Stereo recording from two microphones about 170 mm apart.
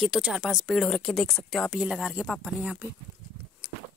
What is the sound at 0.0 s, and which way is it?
Speech, centre (ahead or behind).